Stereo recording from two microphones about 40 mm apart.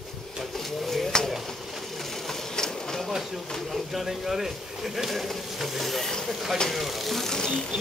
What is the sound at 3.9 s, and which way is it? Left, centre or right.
A man's voice, centre.